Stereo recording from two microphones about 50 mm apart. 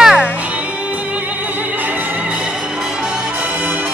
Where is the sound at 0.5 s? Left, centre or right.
Right.